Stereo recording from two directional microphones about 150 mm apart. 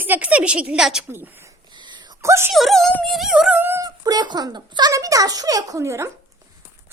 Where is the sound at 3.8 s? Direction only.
25° right (ahead or behind).